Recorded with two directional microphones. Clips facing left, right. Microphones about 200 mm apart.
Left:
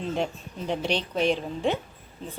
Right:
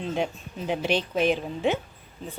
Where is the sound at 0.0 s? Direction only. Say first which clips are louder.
Even; centre (ahead or behind).